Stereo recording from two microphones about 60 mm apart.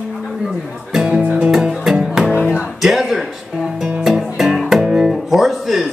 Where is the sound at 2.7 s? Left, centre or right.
Centre.